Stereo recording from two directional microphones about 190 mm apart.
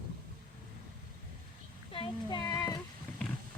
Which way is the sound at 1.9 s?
25° left (ahead or behind).